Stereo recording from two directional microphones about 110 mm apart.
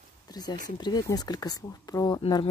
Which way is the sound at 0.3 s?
40° left (ahead or behind).